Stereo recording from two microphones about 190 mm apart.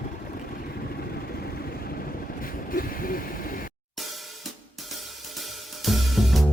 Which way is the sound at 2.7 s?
50° left (ahead or behind).